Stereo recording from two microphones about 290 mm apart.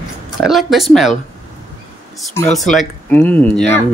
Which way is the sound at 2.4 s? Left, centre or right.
Centre.